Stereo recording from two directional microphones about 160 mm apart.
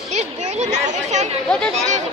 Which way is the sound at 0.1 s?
45° right (ahead or behind).